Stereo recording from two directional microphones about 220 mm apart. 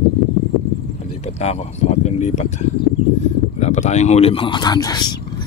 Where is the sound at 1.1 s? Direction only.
30° left (ahead or behind).